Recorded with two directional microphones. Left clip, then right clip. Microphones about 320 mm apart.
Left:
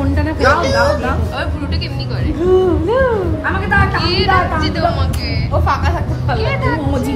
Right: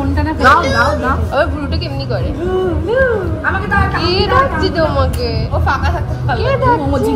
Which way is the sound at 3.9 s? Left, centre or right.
Centre.